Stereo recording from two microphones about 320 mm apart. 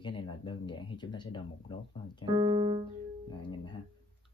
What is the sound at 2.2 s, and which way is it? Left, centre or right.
Piano, centre.